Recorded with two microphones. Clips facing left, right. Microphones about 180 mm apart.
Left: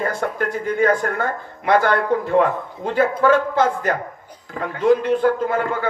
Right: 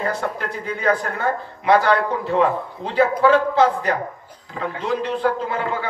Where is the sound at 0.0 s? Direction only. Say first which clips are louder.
Left 2 dB; 50° left (ahead or behind).